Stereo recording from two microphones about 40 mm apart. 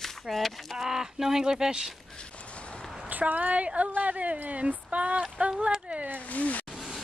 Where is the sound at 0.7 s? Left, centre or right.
Centre.